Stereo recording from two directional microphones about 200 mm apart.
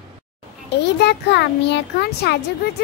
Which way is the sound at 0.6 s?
55° left (ahead or behind).